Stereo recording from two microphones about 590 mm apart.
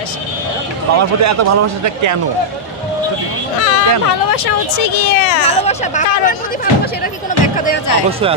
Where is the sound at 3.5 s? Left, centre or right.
Left.